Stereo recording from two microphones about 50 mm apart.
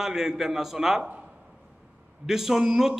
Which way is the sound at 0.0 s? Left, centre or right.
Centre.